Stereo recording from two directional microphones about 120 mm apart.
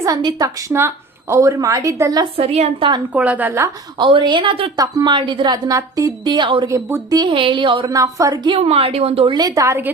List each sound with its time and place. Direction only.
0.0 s a woman's voice: 30° right (ahead or behind)
0.7 s a woman's voice: 20° right (ahead or behind)
2.3 s a woman's voice: 60° right (ahead or behind)
3.1 s a woman's voice: 10° right (ahead or behind)
3.9 s a woman's voice: 40° right (ahead or behind)
6.2 s a woman's voice: 40° right (ahead or behind)
6.7 s a woman's voice: 20° right (ahead or behind)
7.1 s a woman's voice: 40° right (ahead or behind)
7.9 s a woman's voice: 30° right (ahead or behind)
8.4 s a woman's voice: 55° right (ahead or behind)
9.4 s a woman's voice: 25° right (ahead or behind)